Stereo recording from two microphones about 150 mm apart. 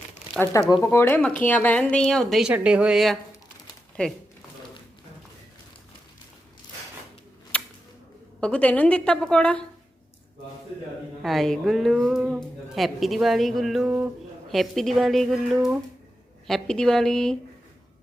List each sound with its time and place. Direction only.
0.7 s a woman's voice: 20° left (ahead or behind); by 3.2 s centre (ahead or behind)
7.5 s a sound: 10° left (ahead or behind)
8.4 s a woman's voice: 10° left (ahead or behind)
11.2 s a woman's voice: centre (ahead or behind)